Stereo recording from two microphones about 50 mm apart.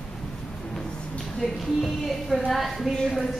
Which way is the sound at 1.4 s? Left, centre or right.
Centre.